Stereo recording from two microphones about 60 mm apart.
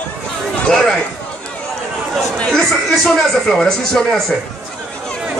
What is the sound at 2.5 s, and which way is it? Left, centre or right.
Speech, centre.